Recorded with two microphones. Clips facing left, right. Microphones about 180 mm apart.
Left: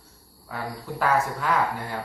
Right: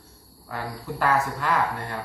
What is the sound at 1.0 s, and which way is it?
Speech, centre (ahead or behind).